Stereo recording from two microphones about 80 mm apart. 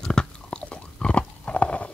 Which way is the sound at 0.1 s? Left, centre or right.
Centre.